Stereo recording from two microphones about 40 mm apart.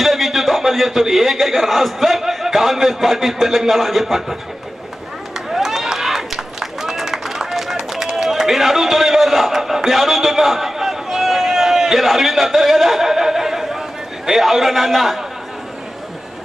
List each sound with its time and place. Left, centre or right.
0.0 s a man's voice: centre
5.5 s run: centre
7.5 s run: centre
7.9 s a sound: centre
14.3 s a man's voice: centre